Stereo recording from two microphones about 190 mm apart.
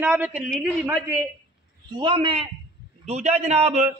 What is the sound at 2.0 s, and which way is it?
A man's voice, 25° right (ahead or behind).